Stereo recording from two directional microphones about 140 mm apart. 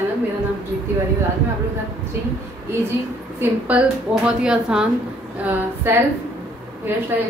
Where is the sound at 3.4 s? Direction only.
10° right (ahead or behind).